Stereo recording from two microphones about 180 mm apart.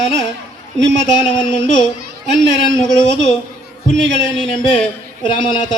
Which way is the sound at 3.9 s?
5° left (ahead or behind).